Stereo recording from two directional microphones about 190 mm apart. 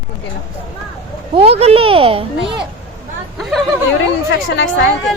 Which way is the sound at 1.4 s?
35° right (ahead or behind).